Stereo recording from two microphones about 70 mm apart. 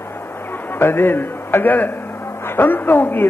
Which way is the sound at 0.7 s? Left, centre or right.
Left.